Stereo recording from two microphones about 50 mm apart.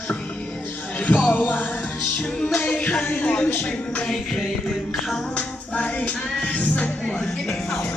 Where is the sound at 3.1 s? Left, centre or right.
Left.